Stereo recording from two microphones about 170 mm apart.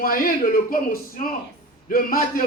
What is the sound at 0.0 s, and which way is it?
A man's voice, 55° left (ahead or behind).